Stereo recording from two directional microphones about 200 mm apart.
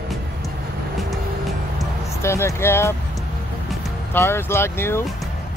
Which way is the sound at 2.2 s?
15° left (ahead or behind).